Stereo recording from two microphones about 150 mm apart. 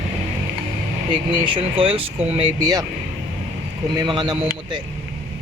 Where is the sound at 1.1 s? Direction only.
35° right (ahead or behind).